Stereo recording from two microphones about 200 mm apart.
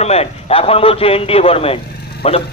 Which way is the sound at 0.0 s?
30° left (ahead or behind).